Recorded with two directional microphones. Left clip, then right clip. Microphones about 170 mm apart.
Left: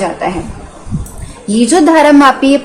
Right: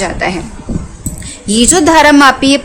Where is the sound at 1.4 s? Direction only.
35° right (ahead or behind).